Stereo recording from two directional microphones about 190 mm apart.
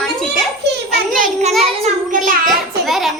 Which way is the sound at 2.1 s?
45° right (ahead or behind).